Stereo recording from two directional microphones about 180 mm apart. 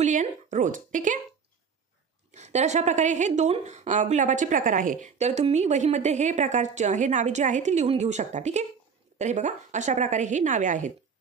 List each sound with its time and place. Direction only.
0.0 s speech: 45° right (ahead or behind)
2.3 s a woman's voice: 40° right (ahead or behind)